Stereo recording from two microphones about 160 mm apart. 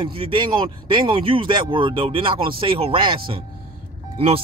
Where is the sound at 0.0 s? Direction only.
35° right (ahead or behind).